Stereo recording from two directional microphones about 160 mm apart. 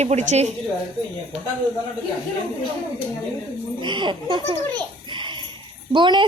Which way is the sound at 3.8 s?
30° right (ahead or behind).